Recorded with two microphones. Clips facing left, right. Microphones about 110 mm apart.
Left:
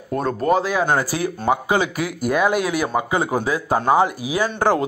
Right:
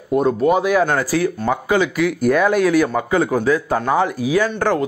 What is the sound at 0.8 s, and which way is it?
Speech, 15° left (ahead or behind).